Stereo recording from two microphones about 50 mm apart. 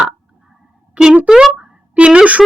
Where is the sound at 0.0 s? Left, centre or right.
Centre.